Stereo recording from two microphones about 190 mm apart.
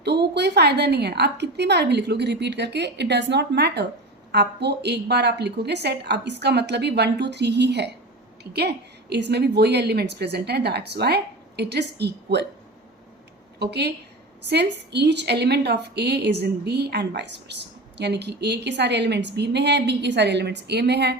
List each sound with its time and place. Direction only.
0.0 s a woman's voice: 60° right (ahead or behind)
13.6 s a woman's voice: 60° right (ahead or behind)